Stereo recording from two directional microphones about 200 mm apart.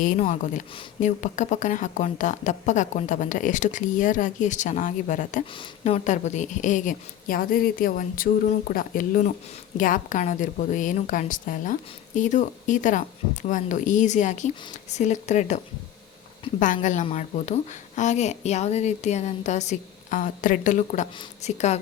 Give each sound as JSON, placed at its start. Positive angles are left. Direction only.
{"t": 0.0, "sound": "a woman's voice", "side_deg": 40}
{"t": 5.5, "sound": "a woman's voice", "side_deg": 25}
{"t": 16.8, "sound": "a woman's voice", "side_deg": 40}